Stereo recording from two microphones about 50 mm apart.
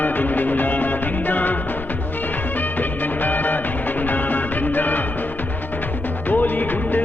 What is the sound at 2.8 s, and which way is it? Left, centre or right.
Music, left.